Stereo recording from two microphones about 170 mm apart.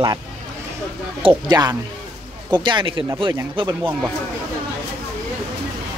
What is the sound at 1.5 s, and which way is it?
Speech, 25° right (ahead or behind).